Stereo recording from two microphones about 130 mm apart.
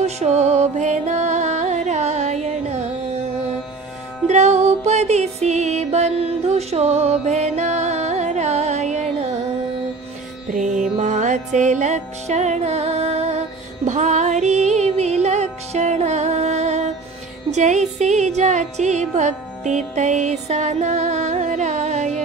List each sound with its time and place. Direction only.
0.0 s music: 60° right (ahead or behind)
4.3 s music: 60° right (ahead or behind)
10.5 s music: 70° right (ahead or behind); by 13.4 s 55° right (ahead or behind)
13.8 s music: 65° right (ahead or behind)